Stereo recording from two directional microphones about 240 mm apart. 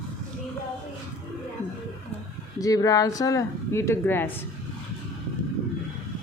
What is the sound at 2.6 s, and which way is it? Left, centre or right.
Speech, centre.